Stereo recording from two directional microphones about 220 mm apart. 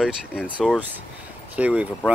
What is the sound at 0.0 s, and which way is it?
Speech, 5° right (ahead or behind).